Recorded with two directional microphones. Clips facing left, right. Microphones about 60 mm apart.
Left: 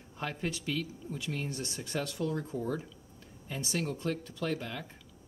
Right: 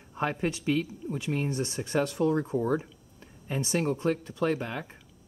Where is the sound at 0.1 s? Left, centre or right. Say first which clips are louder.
Right 7 dB; right.